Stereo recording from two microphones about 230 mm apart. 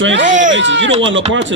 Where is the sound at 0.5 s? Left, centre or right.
Right.